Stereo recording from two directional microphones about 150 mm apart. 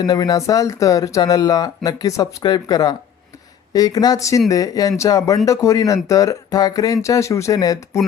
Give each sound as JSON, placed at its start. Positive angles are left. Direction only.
{"t": 0.0, "sound": "speech", "side_deg": 25}